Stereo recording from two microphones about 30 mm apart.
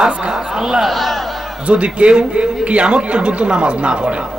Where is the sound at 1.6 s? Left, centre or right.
Right.